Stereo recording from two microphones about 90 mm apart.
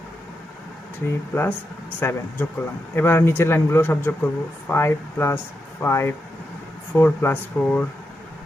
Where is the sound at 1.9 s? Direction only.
25° left (ahead or behind).